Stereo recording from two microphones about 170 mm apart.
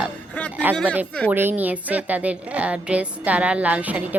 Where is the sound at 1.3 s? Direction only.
10° right (ahead or behind).